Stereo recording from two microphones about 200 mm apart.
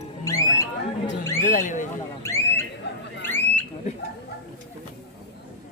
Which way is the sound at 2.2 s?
15° left (ahead or behind).